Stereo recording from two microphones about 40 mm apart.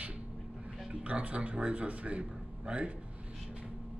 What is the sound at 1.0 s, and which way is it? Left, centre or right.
A man's voice, right.